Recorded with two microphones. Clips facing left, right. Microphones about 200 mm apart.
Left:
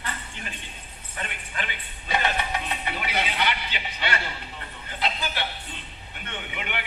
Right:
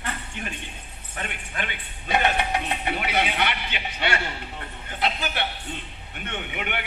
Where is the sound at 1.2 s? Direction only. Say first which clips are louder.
Right 2 dB; 55° right (ahead or behind).